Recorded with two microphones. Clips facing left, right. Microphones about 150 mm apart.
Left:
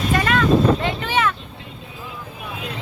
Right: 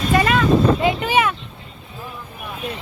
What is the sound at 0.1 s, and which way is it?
Vehicle, 10° right (ahead or behind).